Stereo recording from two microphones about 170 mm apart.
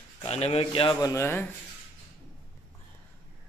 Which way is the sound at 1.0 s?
15° left (ahead or behind).